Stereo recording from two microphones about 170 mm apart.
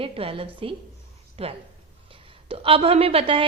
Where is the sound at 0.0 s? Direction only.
30° right (ahead or behind).